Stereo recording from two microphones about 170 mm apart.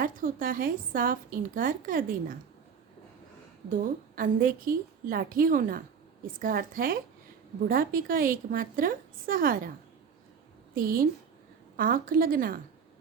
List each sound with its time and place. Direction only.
0.0 s a woman's voice: 55° right (ahead or behind)
3.7 s a woman's voice: 55° right (ahead or behind)
10.8 s a woman's voice: 55° right (ahead or behind)